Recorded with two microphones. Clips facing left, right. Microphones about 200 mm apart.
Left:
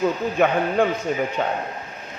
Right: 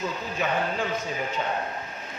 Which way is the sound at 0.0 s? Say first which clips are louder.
Left 10 dB; 60° left (ahead or behind).